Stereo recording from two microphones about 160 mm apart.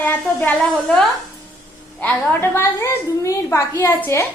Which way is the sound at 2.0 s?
15° left (ahead or behind).